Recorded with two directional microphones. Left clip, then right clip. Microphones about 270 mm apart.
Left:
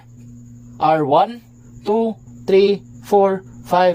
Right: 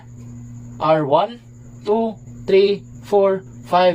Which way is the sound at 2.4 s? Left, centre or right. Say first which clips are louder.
Left 1 dB; left.